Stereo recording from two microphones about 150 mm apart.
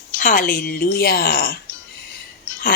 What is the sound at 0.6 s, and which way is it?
Speech, 85° left.